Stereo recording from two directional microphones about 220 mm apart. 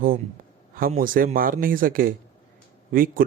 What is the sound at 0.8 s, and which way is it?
Speech, 40° right (ahead or behind).